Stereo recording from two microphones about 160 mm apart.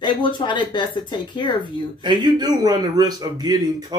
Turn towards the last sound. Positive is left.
turn(degrees=-25)  # may be behind; listen again after turning